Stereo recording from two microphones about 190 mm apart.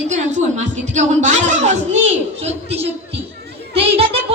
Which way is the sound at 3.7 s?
30° right (ahead or behind).